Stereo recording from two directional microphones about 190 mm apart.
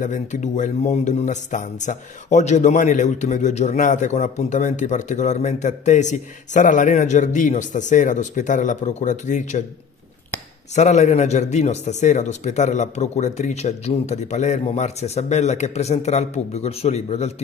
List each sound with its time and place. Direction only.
0.0 s speech: 40° left (ahead or behind)
10.7 s speech: 40° left (ahead or behind)